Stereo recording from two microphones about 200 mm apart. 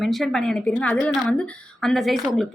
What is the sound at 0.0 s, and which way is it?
A woman's voice, centre (ahead or behind).